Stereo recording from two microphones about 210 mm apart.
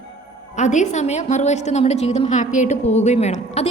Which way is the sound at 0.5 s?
35° left (ahead or behind).